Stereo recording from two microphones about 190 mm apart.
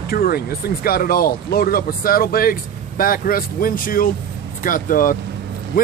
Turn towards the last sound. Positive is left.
turn(degrees=45)  # may be behind; listen again after turning